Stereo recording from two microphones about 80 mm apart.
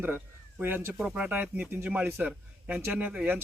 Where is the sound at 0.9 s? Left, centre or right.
Centre.